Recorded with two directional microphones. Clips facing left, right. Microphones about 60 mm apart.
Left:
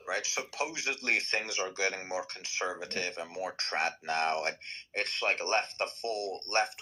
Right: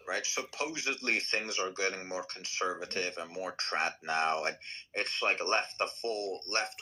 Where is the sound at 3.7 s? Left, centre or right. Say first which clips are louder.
Even; centre.